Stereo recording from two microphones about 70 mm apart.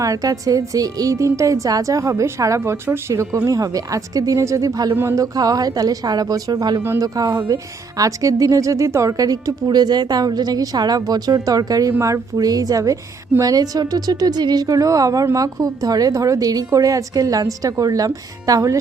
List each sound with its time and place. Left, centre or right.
0.0 s a woman's voice: right
11.9 s a woman's voice: right
12.4 s a woman's voice: right